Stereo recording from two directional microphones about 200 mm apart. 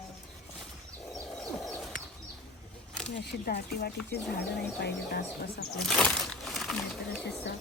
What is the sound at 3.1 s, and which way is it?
Speech, 55° left (ahead or behind).